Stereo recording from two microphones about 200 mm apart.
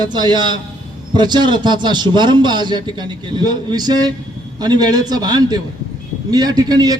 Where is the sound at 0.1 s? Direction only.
20° right (ahead or behind).